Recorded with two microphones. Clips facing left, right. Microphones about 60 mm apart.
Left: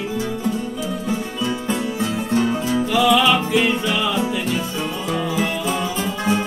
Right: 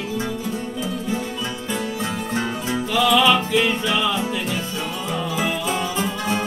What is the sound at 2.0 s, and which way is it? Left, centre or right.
Music, right.